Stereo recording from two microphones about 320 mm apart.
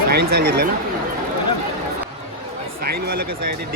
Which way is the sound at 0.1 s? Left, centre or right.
Right.